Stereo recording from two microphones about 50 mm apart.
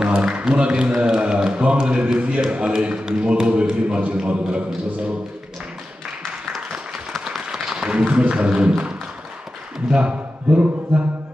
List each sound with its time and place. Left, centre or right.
0.0 s speech: centre
7.1 s a sound: centre
9.8 s speech: right